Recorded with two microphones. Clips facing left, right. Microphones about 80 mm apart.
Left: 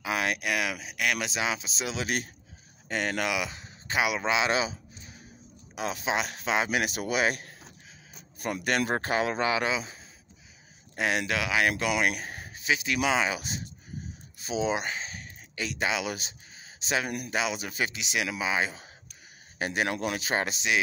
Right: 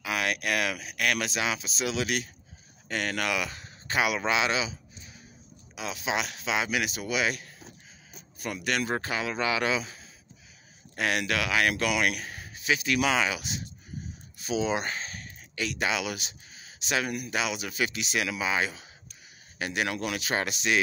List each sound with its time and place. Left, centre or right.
0.0 s speech: left
2.9 s speech: left
4.5 s speech: left
5.8 s speech: left
11.0 s speech: left
12.6 s speech: centre
13.3 s speech: left
14.4 s speech: left
19.6 s speech: left